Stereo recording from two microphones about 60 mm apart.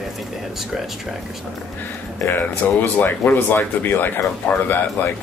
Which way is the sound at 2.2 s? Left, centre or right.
Left.